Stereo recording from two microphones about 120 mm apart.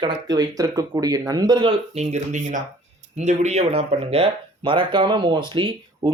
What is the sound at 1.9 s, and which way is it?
Speech, 70° right (ahead or behind).